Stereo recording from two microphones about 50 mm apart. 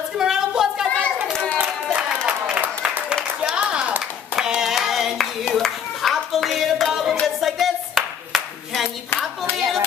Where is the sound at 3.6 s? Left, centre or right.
Right.